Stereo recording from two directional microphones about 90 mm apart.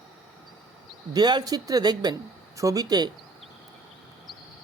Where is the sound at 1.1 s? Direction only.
55° right (ahead or behind).